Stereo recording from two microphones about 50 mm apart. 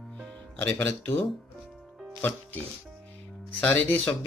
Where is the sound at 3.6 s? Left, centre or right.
Left.